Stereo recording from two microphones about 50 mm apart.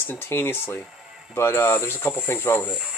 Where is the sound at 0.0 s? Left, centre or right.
Left.